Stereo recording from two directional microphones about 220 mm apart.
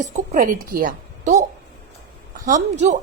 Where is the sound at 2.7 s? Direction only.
30° right (ahead or behind).